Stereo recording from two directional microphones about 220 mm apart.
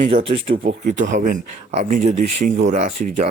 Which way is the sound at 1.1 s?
35° right (ahead or behind).